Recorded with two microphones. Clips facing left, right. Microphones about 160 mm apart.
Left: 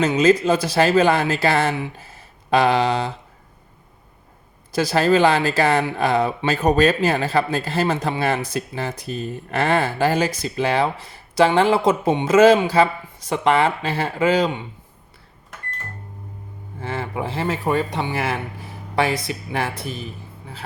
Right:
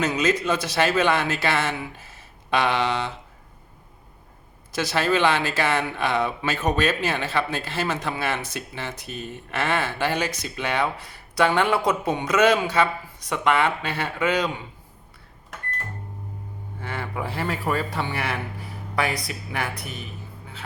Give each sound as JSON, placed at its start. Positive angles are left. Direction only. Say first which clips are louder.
{"t": 0.0, "sound": "speech", "louder": "left 7 dB", "side_deg": 30}
{"t": 4.7, "sound": "speech", "louder": "left 6 dB", "side_deg": 35}
{"t": 16.8, "sound": "speech", "louder": "left 4 dB", "side_deg": 25}